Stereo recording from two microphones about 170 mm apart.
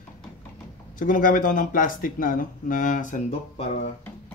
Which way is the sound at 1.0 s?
50° left (ahead or behind).